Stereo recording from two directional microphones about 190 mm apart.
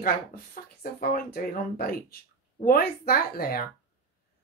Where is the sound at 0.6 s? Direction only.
50° left (ahead or behind).